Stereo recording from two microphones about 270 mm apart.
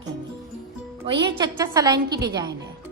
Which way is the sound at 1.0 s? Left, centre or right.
Centre.